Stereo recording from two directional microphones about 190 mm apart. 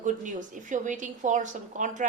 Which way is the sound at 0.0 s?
40° right (ahead or behind).